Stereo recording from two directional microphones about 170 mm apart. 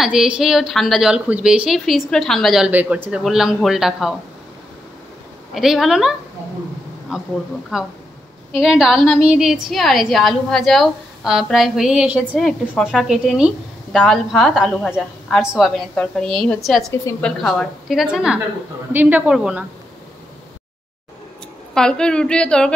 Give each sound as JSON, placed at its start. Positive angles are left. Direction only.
{"t": 0.0, "sound": "a woman's voice", "side_deg": -5}
{"t": 5.5, "sound": "a woman's voice", "side_deg": 0}
{"t": 21.7, "sound": "a woman's voice", "side_deg": 5}